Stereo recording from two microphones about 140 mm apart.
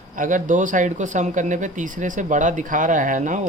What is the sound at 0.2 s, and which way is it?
Speech, 65° right (ahead or behind).